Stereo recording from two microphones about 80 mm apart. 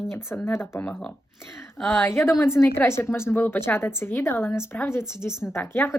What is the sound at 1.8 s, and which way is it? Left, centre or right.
A woman's voice, left.